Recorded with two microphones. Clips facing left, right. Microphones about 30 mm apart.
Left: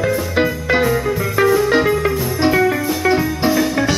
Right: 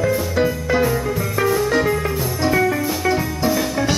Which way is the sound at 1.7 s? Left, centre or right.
Left.